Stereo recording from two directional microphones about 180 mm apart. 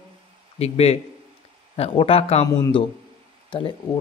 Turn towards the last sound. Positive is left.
turn(degrees=25)  # may be behind; listen again after turning